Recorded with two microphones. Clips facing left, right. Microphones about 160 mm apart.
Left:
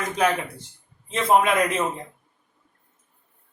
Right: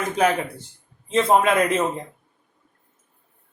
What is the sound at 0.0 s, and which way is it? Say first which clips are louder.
A man's voice: right 2 dB; 30° right (ahead or behind).